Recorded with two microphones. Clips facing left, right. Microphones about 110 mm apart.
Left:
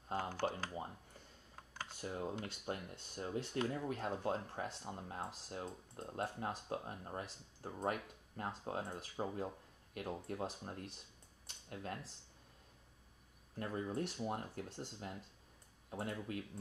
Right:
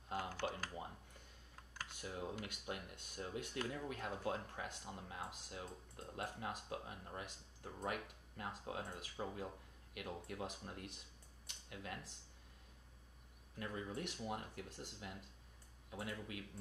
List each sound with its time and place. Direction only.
0.1 s a sound: 30° left (ahead or behind)
2.0 s speech: 30° left (ahead or behind)
13.6 s speech: 35° left (ahead or behind)